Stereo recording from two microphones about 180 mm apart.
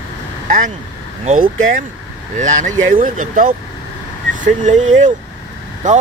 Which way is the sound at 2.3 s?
45° right (ahead or behind).